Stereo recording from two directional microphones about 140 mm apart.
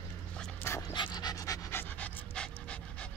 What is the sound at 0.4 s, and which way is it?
Dog, 15° left (ahead or behind).